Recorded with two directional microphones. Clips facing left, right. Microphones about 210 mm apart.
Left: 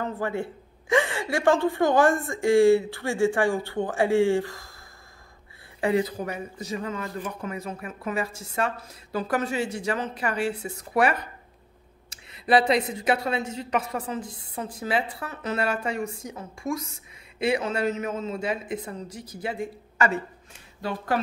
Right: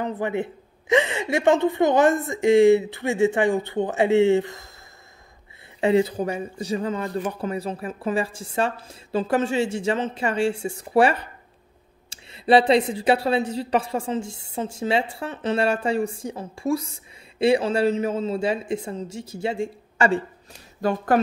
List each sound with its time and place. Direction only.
0.0 s a woman's voice: 20° right (ahead or behind)
5.8 s a woman's voice: 25° right (ahead or behind)
20.8 s speech: 50° right (ahead or behind)